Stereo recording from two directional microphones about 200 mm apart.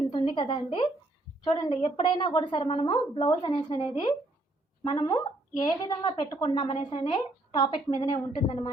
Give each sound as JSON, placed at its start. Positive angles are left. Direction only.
{"t": 0.1, "sound": "a woman's voice", "side_deg": 25}
{"t": 4.8, "sound": "a woman's voice", "side_deg": 25}